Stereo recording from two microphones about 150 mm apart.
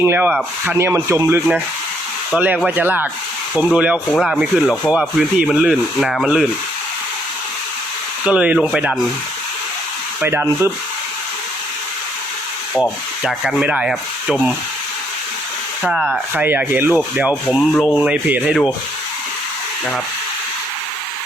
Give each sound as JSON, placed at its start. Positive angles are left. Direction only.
{"t": 0.0, "sound": "rub", "side_deg": -15}
{"t": 3.5, "sound": "speech", "side_deg": -10}
{"t": 8.2, "sound": "rub", "side_deg": -10}
{"t": 10.2, "sound": "rub", "side_deg": -15}
{"t": 13.6, "sound": "speech", "side_deg": -5}
{"t": 15.8, "sound": "speech", "side_deg": 0}
{"t": 16.3, "sound": "rub", "side_deg": -10}
{"t": 17.7, "sound": "speech", "side_deg": 5}
{"t": 18.1, "sound": "rub", "side_deg": -10}